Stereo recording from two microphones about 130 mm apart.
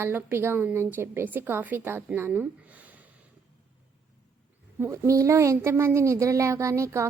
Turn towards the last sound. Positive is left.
turn(degrees=-20)  # may be behind; listen again after turning